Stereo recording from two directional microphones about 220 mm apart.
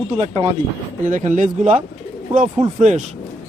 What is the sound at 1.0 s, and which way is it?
Speech, 35° right (ahead or behind).